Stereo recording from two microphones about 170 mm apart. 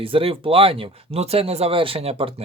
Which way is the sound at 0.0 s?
35° right (ahead or behind).